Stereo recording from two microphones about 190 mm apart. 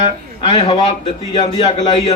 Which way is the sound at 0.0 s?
30° left (ahead or behind).